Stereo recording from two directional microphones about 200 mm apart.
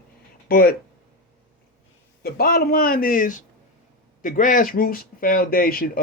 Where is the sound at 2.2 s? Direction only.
50° left (ahead or behind).